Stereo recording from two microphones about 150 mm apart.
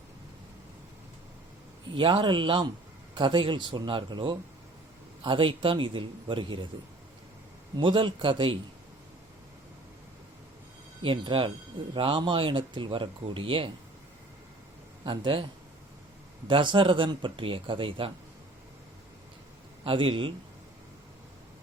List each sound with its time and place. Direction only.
2.0 s speech: 30° right (ahead or behind)
7.8 s speech: 35° right (ahead or behind)
11.0 s speech: 35° right (ahead or behind)
15.0 s speech: 35° right (ahead or behind)
16.5 s speech: 35° right (ahead or behind)
19.8 s speech: 35° right (ahead or behind)